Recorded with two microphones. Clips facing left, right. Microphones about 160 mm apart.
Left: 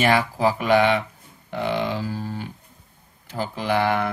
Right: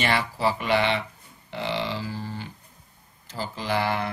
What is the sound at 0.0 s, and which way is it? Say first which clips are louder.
Speech: left 5 dB; 45° left (ahead or behind).